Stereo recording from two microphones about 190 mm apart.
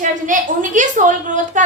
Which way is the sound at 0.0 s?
40° right (ahead or behind).